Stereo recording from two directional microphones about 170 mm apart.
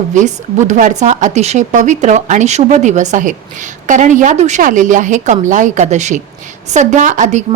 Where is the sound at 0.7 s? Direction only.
45° right (ahead or behind).